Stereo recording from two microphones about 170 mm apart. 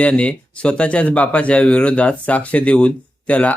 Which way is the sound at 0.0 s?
10° left (ahead or behind).